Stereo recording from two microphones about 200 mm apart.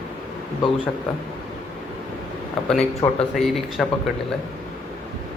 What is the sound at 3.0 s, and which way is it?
Speech, 25° left (ahead or behind).